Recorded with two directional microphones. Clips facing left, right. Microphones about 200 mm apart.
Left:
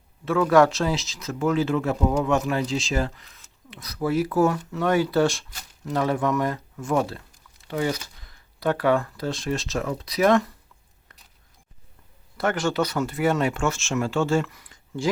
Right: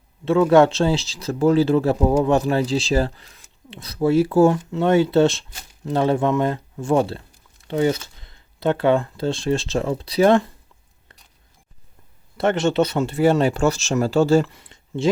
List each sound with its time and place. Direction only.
0.3 s speech: 25° right (ahead or behind)
12.4 s speech: 25° right (ahead or behind)